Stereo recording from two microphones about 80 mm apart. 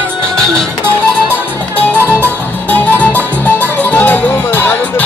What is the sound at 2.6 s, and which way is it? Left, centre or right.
Music, centre.